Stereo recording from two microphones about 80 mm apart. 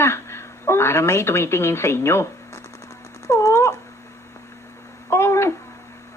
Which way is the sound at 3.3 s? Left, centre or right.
Left.